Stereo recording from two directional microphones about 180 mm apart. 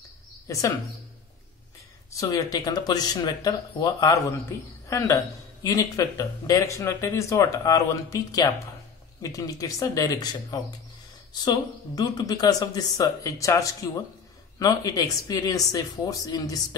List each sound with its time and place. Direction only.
2.1 s speech: 20° left (ahead or behind)